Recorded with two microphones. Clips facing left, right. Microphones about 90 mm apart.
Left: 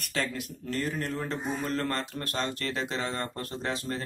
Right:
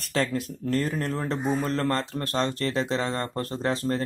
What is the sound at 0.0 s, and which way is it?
Speech, 35° right (ahead or behind).